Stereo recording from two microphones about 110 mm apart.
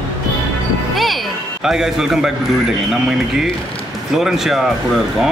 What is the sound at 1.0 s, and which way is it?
Music, centre (ahead or behind).